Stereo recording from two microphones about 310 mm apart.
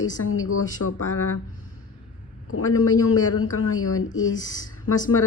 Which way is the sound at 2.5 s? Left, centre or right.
Left.